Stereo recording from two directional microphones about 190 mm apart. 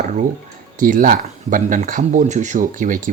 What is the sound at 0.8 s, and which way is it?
Speech, 45° right (ahead or behind).